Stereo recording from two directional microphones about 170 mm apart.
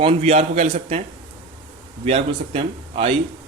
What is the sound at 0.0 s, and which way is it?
Speech, 35° right (ahead or behind).